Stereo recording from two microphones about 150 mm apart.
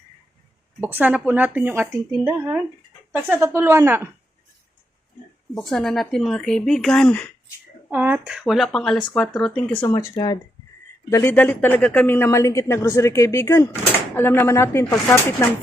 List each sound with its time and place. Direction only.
0.8 s a woman's voice: 10° right (ahead or behind)
5.5 s speech: 5° left (ahead or behind)
7.9 s speech: 10° right (ahead or behind); by 9.8 s 5° left (ahead or behind)
9.8 s speech: 20° left (ahead or behind)